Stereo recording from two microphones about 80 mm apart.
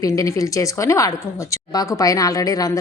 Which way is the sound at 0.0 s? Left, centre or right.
Left.